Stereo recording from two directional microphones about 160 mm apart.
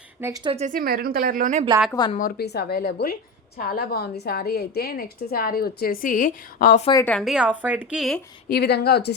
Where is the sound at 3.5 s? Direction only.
65° left (ahead or behind).